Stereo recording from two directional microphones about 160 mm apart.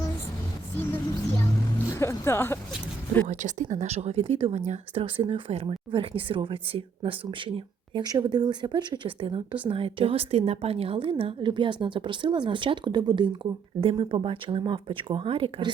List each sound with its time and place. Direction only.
1.9 s music: 15° left (ahead or behind)
3.2 s speech: 50° right (ahead or behind); by 15.7 s 35° right (ahead or behind)